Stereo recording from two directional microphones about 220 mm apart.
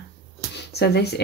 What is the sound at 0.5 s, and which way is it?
Speech, 50° left (ahead or behind).